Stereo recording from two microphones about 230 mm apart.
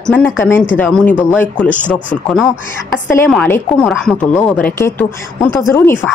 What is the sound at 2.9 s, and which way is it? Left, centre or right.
A woman's voice, centre.